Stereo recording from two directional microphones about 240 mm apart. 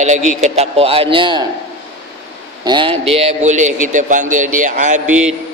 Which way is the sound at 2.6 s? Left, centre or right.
Centre.